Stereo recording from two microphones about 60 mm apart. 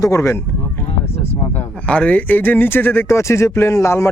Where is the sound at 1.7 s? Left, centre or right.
Centre.